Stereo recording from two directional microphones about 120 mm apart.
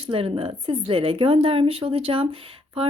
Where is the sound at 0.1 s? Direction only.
50° right (ahead or behind).